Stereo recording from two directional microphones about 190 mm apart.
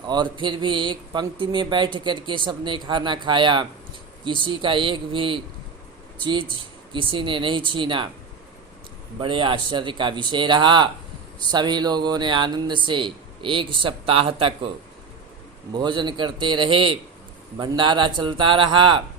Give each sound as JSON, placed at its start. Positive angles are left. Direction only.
{"t": 0.1, "sound": "speech", "side_deg": -25}
{"t": 9.1, "sound": "speech", "side_deg": -25}
{"t": 15.7, "sound": "speech", "side_deg": -25}